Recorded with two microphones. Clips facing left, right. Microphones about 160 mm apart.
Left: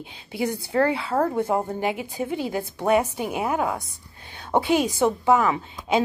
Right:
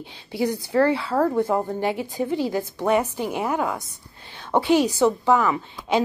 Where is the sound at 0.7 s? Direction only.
20° left (ahead or behind).